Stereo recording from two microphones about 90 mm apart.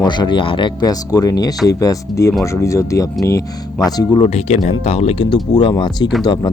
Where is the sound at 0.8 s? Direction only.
45° left (ahead or behind).